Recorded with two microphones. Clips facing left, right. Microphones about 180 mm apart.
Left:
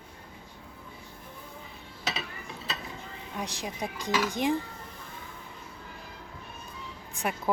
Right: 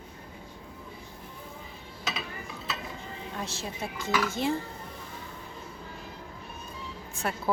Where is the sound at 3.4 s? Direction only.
15° left (ahead or behind).